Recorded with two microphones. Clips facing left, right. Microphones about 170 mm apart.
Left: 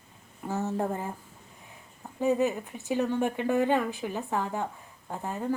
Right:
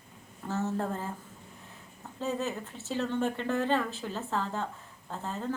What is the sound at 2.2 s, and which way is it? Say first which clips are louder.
Speech: left 7 dB; 15° left (ahead or behind).